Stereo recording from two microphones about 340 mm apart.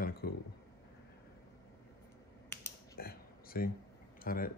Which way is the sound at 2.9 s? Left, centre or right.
Left.